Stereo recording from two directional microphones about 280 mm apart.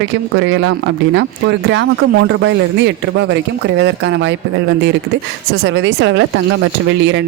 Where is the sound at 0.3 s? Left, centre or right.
Right.